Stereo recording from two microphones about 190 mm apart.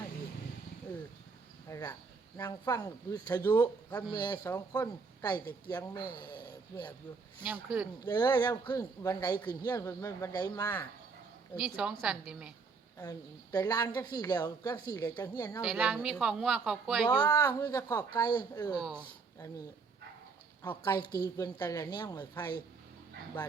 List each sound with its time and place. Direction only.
1.7 s speech: 15° left (ahead or behind)
4.1 s speech: 20° left (ahead or behind)
6.1 s a sound: 25° left (ahead or behind)
7.4 s a woman's voice: 5° right (ahead or behind)
8.0 s speech: 20° left (ahead or behind)
11.8 s a woman's voice: 5° right (ahead or behind)
13.0 s speech: 20° left (ahead or behind)
15.6 s a woman's voice: 5° right (ahead or behind)
17.0 s speech: 25° left (ahead or behind)
20.7 s speech: 20° left (ahead or behind)
21.0 s a woman's voice: 55° left (ahead or behind)
21.3 s speech: 20° left (ahead or behind)